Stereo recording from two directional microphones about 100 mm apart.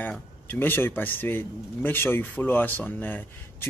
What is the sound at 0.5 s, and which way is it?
Speech, 20° left (ahead or behind).